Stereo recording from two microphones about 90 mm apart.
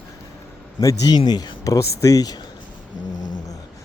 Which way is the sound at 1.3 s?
50° left (ahead or behind).